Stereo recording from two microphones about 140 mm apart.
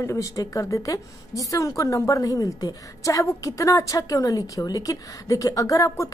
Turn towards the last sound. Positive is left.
turn(degrees=25)  # may be behind; listen again after turning